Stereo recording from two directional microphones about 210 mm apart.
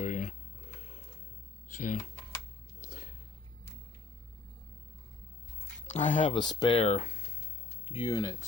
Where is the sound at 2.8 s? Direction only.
40° left (ahead or behind).